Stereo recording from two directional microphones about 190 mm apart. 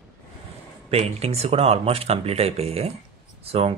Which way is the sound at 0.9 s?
35° right (ahead or behind).